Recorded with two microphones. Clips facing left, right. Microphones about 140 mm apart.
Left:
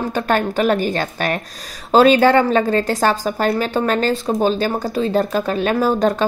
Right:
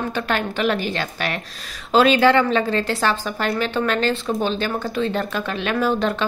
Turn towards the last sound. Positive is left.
turn(degrees=40)  # may be behind; listen again after turning